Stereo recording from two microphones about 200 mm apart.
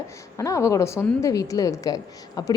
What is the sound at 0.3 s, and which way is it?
A woman's voice, 15° left (ahead or behind).